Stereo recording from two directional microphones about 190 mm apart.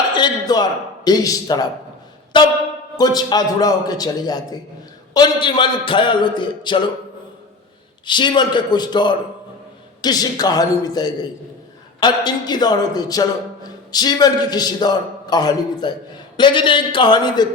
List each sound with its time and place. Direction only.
0.1 s a man's voice: 20° left (ahead or behind)
8.0 s a man's voice: 25° left (ahead or behind)